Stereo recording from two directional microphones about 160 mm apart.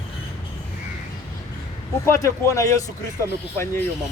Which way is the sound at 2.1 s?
20° left (ahead or behind).